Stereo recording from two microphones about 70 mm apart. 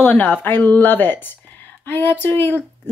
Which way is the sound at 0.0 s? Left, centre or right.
Left.